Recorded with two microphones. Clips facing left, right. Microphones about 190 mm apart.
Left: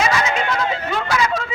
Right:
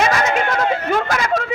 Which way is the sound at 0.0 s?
50° right (ahead or behind).